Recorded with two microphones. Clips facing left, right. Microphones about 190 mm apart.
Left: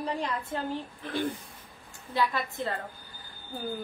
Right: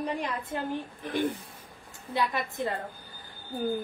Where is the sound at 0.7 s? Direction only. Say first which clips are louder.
Right 2 dB; 15° right (ahead or behind).